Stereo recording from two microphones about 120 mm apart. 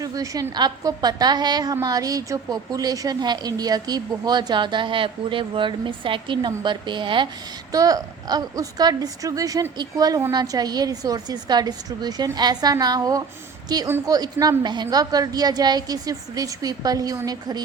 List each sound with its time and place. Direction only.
0.0 s a woman's voice: 30° right (ahead or behind)
7.7 s a woman's voice: 30° right (ahead or behind)